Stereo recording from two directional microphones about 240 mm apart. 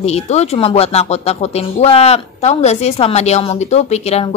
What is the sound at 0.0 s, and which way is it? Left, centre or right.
Speech, left.